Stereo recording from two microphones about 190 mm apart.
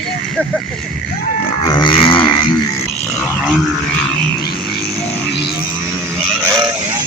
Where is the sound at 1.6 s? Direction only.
20° left (ahead or behind).